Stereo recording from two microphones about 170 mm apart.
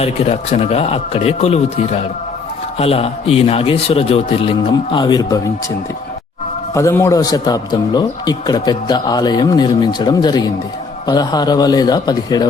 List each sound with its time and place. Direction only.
0.0 s a man's voice: 40° left (ahead or behind)
6.7 s a man's voice: 15° left (ahead or behind)